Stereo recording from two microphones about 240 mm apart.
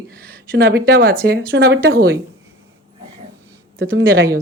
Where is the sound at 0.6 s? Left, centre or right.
Right.